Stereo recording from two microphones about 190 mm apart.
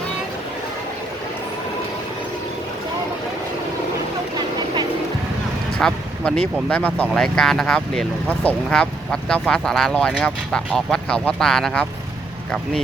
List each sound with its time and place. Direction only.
4.4 s vehicle: 25° right (ahead or behind)
5.8 s speech: 5° left (ahead or behind)